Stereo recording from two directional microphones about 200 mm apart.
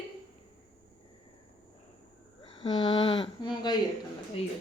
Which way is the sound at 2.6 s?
25° left (ahead or behind).